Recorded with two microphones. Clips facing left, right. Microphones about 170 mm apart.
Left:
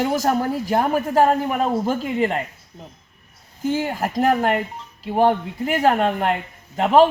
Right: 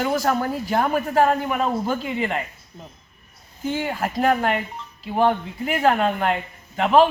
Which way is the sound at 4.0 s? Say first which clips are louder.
Left 1 dB; 35° left (ahead or behind).